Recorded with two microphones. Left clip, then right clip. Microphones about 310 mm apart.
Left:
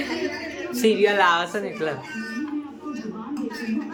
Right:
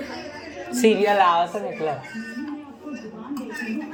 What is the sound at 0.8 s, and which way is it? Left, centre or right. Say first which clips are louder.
Speech: right 1 dB; centre.